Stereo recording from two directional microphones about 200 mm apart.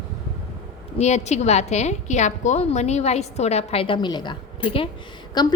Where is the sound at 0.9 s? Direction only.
35° left (ahead or behind).